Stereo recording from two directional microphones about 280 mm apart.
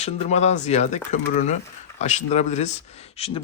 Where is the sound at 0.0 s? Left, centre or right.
Left.